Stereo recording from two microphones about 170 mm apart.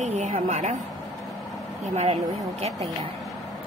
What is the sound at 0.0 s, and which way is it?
Speech, 45° right (ahead or behind).